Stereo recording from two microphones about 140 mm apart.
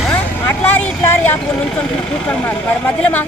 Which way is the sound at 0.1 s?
15° left (ahead or behind).